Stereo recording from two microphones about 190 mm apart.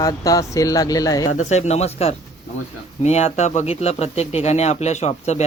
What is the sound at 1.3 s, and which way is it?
Speech, 40° left (ahead or behind).